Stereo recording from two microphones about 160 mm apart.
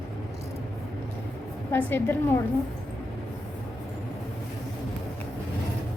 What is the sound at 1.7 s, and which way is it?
Speech, 15° left (ahead or behind).